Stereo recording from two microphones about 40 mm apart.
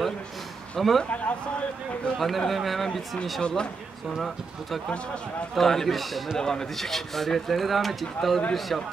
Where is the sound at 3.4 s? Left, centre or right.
Left.